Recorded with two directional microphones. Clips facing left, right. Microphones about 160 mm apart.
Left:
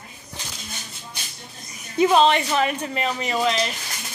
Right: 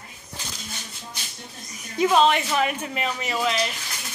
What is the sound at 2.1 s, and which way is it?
A woman's voice, 5° right (ahead or behind).